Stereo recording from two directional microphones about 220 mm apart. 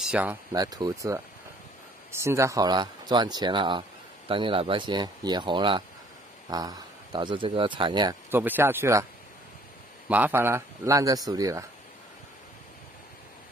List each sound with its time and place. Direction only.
0.0 s speech: 5° right (ahead or behind)
2.2 s speech: 15° right (ahead or behind)
8.3 s speech: 10° right (ahead or behind)
10.0 s speech: 5° right (ahead or behind)